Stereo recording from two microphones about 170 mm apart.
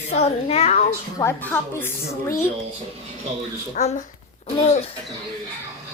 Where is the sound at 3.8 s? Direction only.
45° left (ahead or behind).